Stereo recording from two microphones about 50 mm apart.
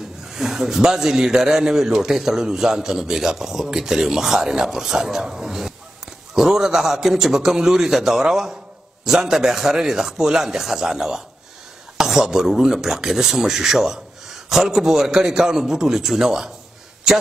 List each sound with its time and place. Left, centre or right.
0.3 s a man's voice: centre